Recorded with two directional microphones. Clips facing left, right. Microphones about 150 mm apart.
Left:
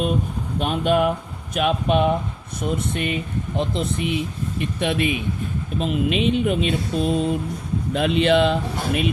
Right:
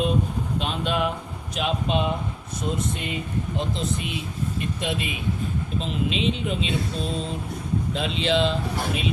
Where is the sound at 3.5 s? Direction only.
60° left (ahead or behind).